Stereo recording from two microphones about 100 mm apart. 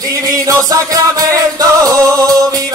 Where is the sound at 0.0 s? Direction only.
35° right (ahead or behind).